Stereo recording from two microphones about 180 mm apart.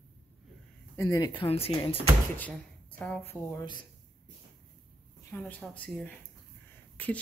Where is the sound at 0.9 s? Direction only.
20° left (ahead or behind).